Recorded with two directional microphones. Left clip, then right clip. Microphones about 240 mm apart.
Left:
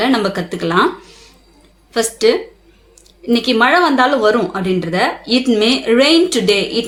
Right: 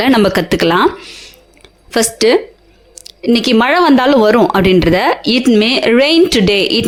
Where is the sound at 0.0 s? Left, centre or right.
Right.